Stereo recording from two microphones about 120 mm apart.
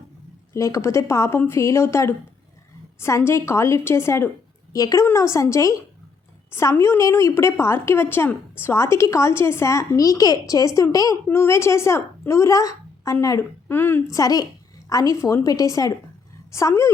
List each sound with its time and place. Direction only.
0.5 s a woman's voice: 25° left (ahead or behind)
14.2 s a woman's voice: 30° left (ahead or behind)